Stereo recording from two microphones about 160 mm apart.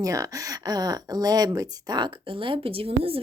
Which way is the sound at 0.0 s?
20° right (ahead or behind).